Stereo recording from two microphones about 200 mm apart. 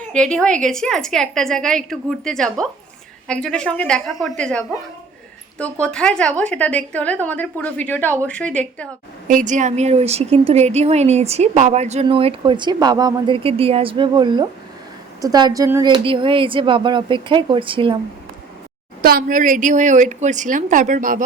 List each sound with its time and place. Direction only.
0.1 s a woman's voice: 5° left (ahead or behind)
5.8 s a woman's voice: 5° left (ahead or behind)
9.2 s speech: 40° right (ahead or behind)
19.0 s speech: 45° right (ahead or behind)